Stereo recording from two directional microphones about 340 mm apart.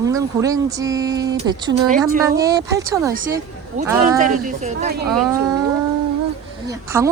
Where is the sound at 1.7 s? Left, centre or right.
Right.